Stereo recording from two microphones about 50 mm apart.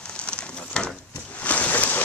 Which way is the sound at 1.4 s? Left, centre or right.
Left.